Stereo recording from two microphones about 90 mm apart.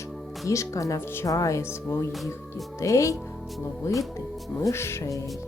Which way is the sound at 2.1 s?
Centre (ahead or behind).